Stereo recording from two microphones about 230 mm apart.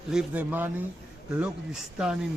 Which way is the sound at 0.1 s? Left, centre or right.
Centre.